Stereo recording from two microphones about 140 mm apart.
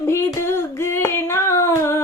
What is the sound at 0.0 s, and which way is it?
Female singing, 20° left (ahead or behind).